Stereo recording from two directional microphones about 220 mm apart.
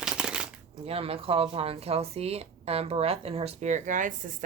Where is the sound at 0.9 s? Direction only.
25° right (ahead or behind).